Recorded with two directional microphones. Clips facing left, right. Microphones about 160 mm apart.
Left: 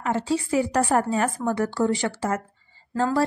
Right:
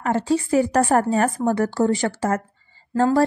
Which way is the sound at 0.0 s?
50° right (ahead or behind).